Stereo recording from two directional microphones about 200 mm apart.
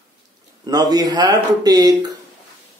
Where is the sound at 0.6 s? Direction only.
20° right (ahead or behind).